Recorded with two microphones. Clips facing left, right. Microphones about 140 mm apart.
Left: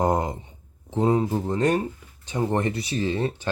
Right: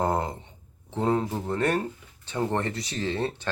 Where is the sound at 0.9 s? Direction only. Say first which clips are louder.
Left 4 dB; 10° left (ahead or behind).